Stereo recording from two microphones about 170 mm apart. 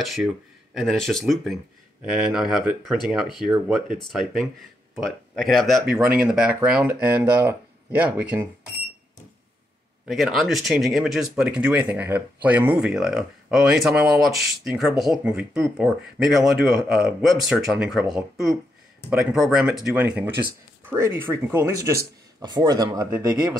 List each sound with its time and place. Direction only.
0.0 s speech: centre (ahead or behind)
10.0 s speech: centre (ahead or behind); by 23.6 s 20° right (ahead or behind)